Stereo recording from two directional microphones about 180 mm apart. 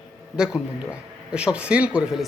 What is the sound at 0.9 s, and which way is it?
Speech, 5° right (ahead or behind).